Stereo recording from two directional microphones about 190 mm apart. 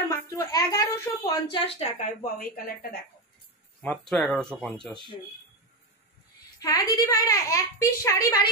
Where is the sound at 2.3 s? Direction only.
50° left (ahead or behind).